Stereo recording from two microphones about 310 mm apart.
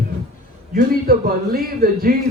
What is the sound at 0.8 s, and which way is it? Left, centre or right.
A man's voice, right.